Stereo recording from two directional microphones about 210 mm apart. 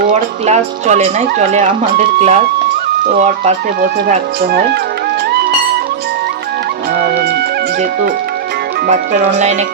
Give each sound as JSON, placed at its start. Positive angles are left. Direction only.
{"t": 0.4, "sound": "speech", "side_deg": -35}
{"t": 9.3, "sound": "speech", "side_deg": -35}